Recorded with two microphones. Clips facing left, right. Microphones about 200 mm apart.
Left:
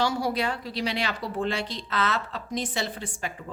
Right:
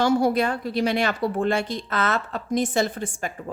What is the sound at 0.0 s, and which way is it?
A woman's voice, 50° right (ahead or behind).